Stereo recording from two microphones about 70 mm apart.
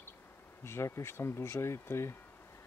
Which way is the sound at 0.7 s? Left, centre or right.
Left.